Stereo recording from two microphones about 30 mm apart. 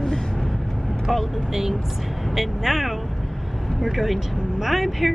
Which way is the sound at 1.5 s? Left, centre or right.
Centre.